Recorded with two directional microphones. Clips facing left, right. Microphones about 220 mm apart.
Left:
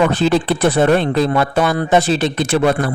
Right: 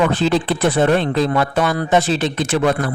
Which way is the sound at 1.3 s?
30° left (ahead or behind).